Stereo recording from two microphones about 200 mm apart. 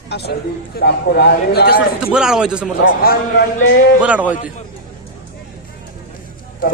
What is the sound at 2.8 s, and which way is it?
Speech, 50° left (ahead or behind).